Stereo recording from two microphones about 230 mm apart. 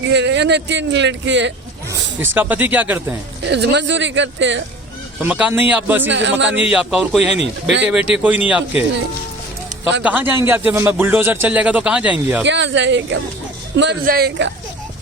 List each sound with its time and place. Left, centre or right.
0.0 s speech: right
1.9 s speech: centre
3.4 s speech: right
5.2 s speech: centre
6.1 s speech: right
6.7 s speech: centre
10.0 s speech: centre
12.5 s speech: right